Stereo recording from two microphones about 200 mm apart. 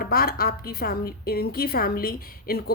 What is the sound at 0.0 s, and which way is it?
A woman's voice, 50° left (ahead or behind).